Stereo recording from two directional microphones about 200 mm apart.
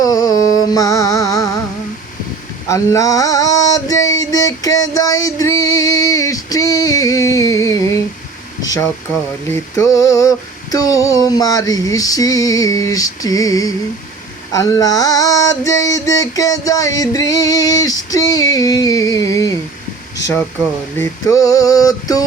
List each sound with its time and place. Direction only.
0.0 s music: 20° left (ahead or behind)
2.6 s a sound: 15° left (ahead or behind)
4.4 s female singing: 20° left (ahead or behind)
5.5 s music: 15° left (ahead or behind)
9.5 s female singing: 15° left (ahead or behind)
21.0 s female singing: 15° left (ahead or behind)